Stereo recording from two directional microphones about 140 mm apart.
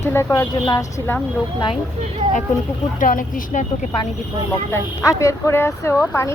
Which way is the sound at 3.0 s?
75° left (ahead or behind).